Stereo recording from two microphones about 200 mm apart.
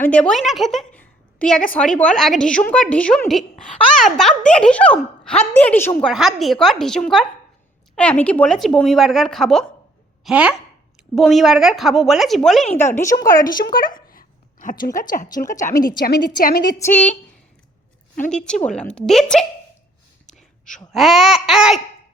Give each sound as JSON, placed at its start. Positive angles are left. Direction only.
{"t": 0.0, "sound": "a woman's voice", "side_deg": 5}
{"t": 12.7, "sound": "a woman's voice", "side_deg": 10}
{"t": 13.2, "sound": "a sound", "side_deg": 45}
{"t": 14.9, "sound": "a woman's voice", "side_deg": 40}
{"t": 16.7, "sound": "a woman's voice", "side_deg": 10}
{"t": 18.3, "sound": "speech", "side_deg": 5}
{"t": 20.9, "sound": "speech", "side_deg": 0}